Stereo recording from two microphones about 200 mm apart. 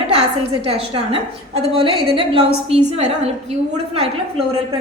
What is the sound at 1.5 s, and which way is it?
A woman's voice, 30° right (ahead or behind).